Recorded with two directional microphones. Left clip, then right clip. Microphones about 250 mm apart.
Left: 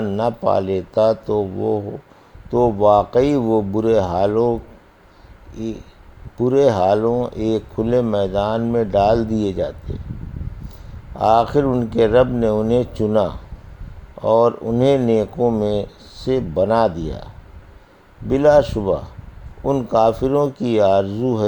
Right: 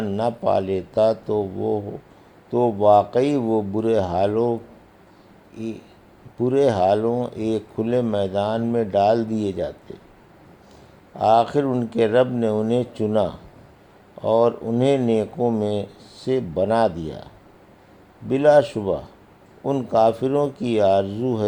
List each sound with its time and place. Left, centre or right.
0.0 s a man's voice: left
11.1 s speech: left
18.3 s speech: left